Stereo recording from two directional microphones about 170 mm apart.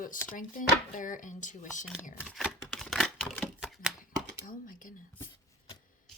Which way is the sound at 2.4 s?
Centre (ahead or behind).